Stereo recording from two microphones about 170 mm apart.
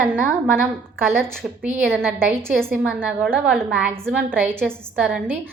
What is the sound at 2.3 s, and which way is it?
A woman's voice, 10° right (ahead or behind).